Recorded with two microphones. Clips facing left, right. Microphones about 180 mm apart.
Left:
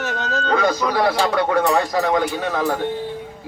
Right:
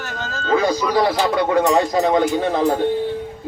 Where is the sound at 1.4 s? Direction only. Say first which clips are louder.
Right 4 dB; 20° right (ahead or behind).